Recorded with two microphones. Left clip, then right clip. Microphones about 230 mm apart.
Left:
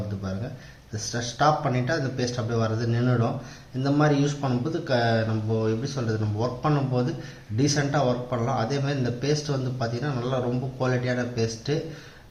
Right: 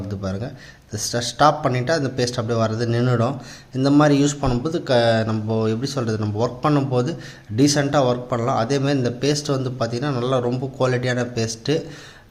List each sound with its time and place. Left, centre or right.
0.9 s speech: right